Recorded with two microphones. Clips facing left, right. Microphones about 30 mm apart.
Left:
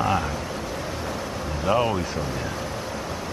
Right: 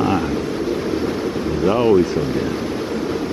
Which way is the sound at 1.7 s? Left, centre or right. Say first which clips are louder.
Right 6 dB; centre.